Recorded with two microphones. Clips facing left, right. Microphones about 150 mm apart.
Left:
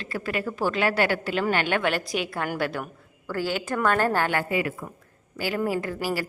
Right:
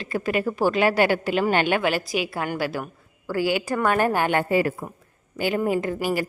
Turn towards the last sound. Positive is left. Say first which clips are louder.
# right 4 dB
turn(degrees=-20)  # may be behind; listen again after turning